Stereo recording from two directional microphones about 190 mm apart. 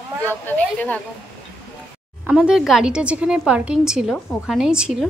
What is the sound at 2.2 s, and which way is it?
Speech, 5° right (ahead or behind).